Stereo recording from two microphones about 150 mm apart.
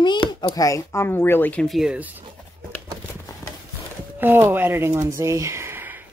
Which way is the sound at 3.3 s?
20° left (ahead or behind).